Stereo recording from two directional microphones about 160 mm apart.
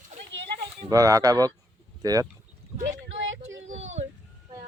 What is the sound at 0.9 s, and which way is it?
Speech, 20° right (ahead or behind).